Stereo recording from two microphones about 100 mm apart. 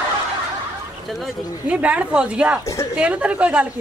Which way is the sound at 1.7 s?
15° right (ahead or behind).